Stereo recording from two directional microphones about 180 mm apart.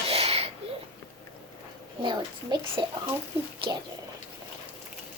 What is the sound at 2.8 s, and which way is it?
Speech, 25° right (ahead or behind).